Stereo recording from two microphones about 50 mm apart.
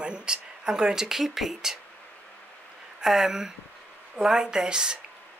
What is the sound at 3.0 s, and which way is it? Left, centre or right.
Speech, centre.